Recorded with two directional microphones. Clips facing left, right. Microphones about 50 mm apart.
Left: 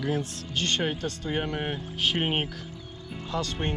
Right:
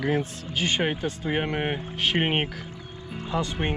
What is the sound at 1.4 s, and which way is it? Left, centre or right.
Speech, right.